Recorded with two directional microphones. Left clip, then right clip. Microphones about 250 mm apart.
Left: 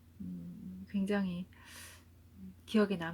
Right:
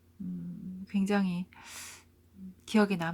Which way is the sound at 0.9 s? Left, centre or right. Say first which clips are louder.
Right 5 dB; centre.